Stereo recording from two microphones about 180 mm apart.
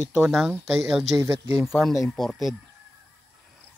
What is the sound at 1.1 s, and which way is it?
Speech, 15° right (ahead or behind).